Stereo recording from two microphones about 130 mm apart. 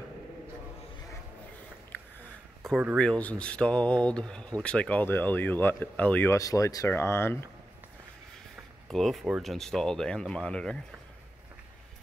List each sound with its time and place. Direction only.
2.6 s speech: 5° left (ahead or behind)
6.3 s speech: 25° left (ahead or behind)
8.8 s speech: centre (ahead or behind)